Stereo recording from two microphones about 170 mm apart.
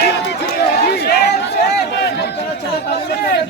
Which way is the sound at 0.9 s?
70° left (ahead or behind).